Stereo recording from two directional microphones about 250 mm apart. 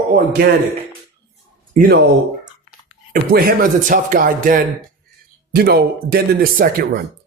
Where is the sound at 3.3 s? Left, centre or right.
Right.